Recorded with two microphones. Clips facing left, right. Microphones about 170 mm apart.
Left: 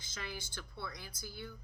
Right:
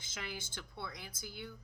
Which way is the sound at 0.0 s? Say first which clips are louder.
Even; 20° right (ahead or behind).